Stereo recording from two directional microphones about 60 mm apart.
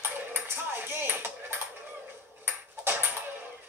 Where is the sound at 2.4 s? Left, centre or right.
Right.